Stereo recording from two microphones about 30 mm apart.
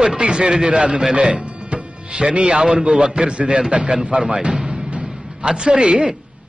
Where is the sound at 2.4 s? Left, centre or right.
Right.